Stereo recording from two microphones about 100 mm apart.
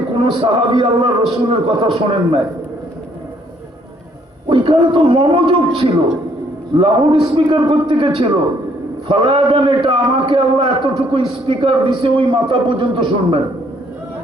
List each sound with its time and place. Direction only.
0.2 s a man's voice: 55° right (ahead or behind)
4.4 s a man's voice: 55° right (ahead or behind)